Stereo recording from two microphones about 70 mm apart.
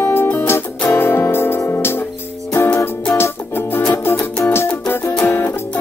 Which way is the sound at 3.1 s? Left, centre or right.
Left.